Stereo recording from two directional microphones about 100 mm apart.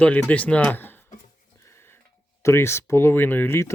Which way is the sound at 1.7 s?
25° left (ahead or behind).